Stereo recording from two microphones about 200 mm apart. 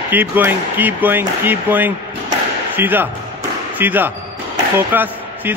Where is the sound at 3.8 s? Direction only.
10° right (ahead or behind).